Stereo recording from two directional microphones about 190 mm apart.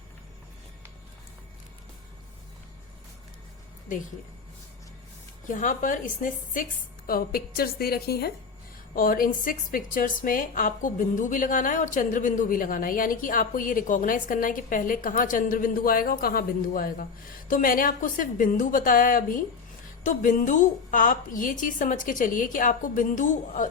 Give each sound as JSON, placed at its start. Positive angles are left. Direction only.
{"t": 5.5, "sound": "a woman's voice", "side_deg": 45}